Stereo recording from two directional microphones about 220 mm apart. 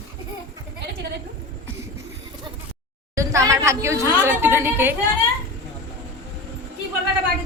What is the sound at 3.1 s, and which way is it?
A woman's voice, 15° right (ahead or behind).